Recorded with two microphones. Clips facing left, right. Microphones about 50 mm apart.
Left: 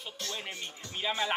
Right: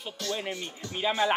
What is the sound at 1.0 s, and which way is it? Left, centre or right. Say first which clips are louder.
Speech: right 6 dB; centre.